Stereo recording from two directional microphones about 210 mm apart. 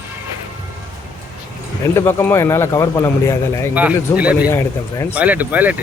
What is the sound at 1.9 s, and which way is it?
A man's voice, 10° left (ahead or behind).